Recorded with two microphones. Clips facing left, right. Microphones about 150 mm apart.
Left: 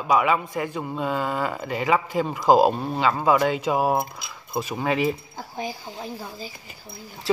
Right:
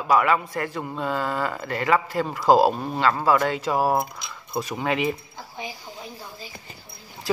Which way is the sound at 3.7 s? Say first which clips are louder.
Right 3 dB; 20° left (ahead or behind).